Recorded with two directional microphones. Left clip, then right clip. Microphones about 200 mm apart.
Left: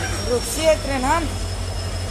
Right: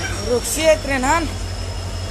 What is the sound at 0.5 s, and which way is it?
Speech, 25° right (ahead or behind).